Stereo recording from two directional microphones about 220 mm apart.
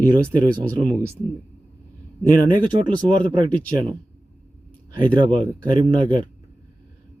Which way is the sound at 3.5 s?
5° left (ahead or behind).